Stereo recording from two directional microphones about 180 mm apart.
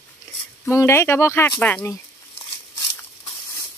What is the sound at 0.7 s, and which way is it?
Speech, 15° left (ahead or behind).